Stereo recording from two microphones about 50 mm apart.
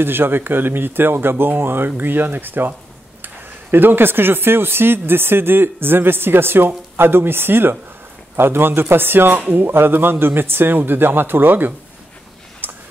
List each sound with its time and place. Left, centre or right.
0.0 s speech: right
3.7 s speech: right
12.6 s a sound: right